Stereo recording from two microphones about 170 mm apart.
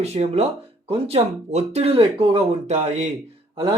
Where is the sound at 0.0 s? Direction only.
40° right (ahead or behind).